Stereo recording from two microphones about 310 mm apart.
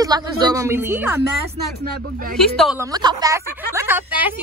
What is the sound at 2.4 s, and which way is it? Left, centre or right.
A woman's voice, centre.